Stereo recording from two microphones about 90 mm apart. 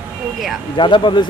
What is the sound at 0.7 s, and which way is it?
Speech, 60° left (ahead or behind).